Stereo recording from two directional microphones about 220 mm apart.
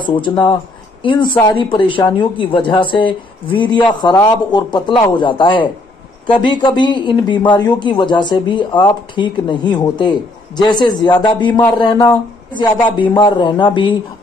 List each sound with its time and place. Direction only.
0.0 s speech: 20° left (ahead or behind)